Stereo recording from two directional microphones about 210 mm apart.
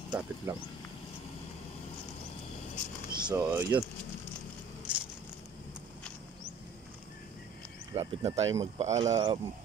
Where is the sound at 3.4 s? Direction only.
15° right (ahead or behind).